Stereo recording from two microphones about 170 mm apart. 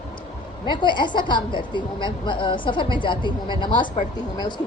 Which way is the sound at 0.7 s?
25° left (ahead or behind).